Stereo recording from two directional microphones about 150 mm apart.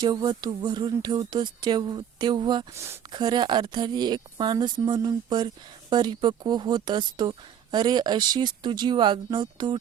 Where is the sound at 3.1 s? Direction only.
30° right (ahead or behind).